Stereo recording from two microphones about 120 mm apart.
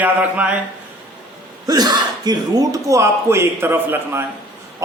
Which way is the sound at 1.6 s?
35° right (ahead or behind).